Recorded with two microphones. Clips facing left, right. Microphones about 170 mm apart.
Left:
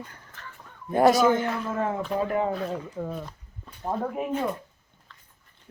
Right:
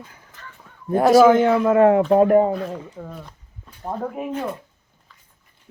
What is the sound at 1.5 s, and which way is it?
Speech, 80° right.